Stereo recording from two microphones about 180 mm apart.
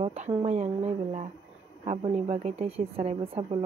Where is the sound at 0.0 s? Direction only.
35° right (ahead or behind).